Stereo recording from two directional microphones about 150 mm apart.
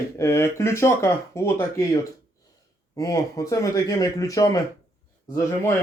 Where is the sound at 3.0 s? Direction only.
25° left (ahead or behind).